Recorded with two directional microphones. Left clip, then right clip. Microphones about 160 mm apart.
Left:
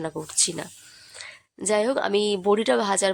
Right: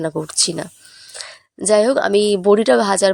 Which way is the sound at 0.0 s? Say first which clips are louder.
Right 7 dB; 35° right (ahead or behind).